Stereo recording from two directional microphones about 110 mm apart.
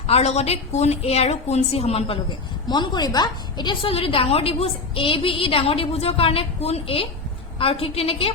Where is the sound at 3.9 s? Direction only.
55° left (ahead or behind).